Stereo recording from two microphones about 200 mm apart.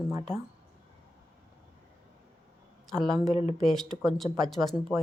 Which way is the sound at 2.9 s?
Centre (ahead or behind).